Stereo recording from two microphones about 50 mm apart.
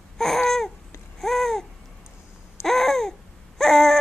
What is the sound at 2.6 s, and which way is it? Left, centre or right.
Babbling, centre.